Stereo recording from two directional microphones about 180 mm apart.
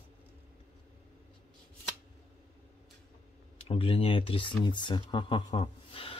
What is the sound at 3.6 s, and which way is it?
Speech, 30° left (ahead or behind).